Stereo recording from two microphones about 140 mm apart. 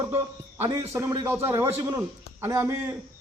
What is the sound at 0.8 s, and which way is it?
A man's voice, 15° right (ahead or behind).